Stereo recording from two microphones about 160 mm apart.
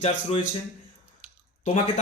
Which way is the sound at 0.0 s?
45° left (ahead or behind).